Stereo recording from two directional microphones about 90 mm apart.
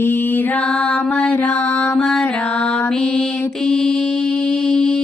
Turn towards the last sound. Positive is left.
turn(degrees=5)  # may be behind; listen again after turning